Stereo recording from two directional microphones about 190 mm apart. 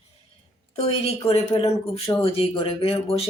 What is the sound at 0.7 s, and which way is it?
Speech, 35° left (ahead or behind).